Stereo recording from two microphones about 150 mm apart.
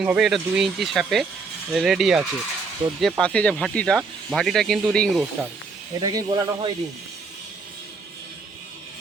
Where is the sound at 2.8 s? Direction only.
40° right (ahead or behind).